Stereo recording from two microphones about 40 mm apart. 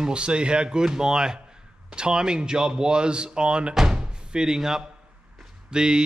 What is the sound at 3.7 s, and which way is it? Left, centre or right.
Door, centre.